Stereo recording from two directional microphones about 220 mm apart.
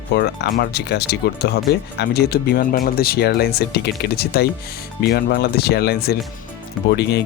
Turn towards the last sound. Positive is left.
turn(degrees=50)  # may be behind; listen again after turning